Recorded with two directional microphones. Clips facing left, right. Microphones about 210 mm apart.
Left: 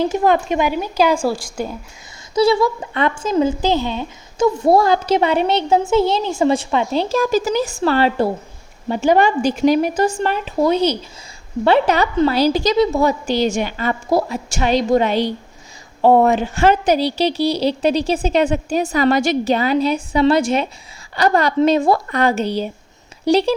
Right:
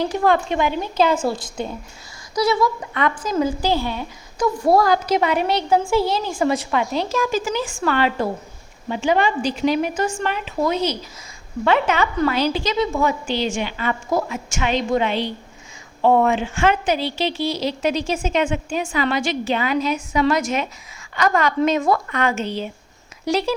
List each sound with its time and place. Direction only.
0.0 s a woman's voice: 20° left (ahead or behind)
2.3 s a woman's voice: 30° left (ahead or behind)
9.0 s a woman's voice: 45° left (ahead or behind)